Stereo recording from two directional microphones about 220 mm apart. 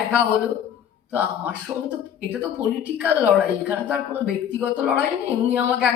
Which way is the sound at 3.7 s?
5° right (ahead or behind).